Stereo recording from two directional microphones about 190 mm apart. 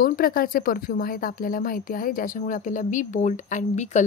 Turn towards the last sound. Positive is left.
turn(degrees=40)  # may be behind; listen again after turning